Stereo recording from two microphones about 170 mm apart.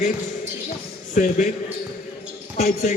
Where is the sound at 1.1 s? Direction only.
45° left (ahead or behind).